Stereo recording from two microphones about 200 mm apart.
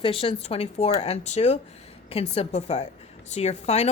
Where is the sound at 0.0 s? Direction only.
30° left (ahead or behind).